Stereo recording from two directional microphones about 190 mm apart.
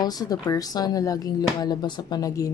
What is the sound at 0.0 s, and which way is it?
Speech, 20° left (ahead or behind).